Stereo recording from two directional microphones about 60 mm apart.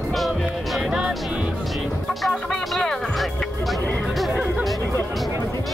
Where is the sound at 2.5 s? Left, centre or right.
Centre.